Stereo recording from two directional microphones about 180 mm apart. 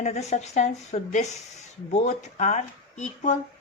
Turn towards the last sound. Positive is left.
turn(degrees=40)  # may be behind; listen again after turning